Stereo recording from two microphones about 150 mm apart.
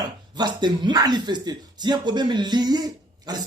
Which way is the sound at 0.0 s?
30° right (ahead or behind).